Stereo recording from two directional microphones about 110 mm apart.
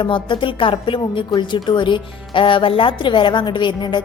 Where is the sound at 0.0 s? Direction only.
50° left (ahead or behind).